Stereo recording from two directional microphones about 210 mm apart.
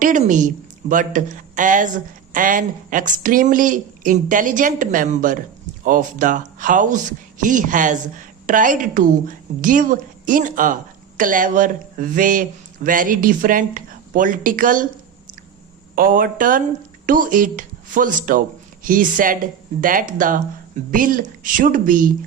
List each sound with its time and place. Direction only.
0.0 s a woman's voice: 35° right (ahead or behind)
16.0 s speech: 45° right (ahead or behind)